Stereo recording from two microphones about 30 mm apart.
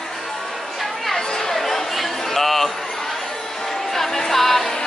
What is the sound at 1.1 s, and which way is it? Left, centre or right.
Chatter, centre.